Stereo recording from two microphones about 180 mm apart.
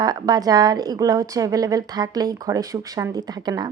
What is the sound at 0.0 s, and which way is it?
A woman's voice, 20° right (ahead or behind).